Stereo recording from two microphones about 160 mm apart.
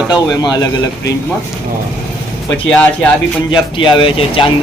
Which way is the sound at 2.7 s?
5° left (ahead or behind).